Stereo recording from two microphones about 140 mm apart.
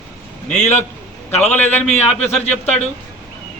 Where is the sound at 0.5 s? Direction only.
55° left (ahead or behind).